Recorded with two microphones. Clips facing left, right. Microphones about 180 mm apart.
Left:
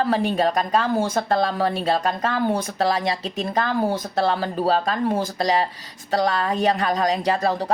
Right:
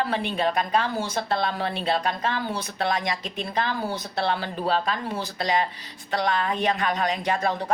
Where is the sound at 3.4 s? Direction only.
45° left (ahead or behind).